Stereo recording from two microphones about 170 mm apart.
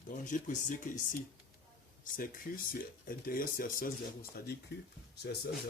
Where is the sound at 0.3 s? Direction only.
50° left (ahead or behind).